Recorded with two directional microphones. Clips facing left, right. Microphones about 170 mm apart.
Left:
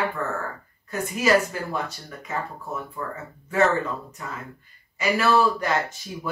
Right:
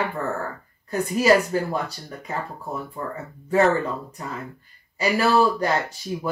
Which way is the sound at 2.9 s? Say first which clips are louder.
Right 2 dB; 35° right (ahead or behind).